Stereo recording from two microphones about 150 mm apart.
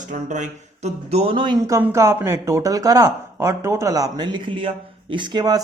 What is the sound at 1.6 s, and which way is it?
Speech, 20° right (ahead or behind).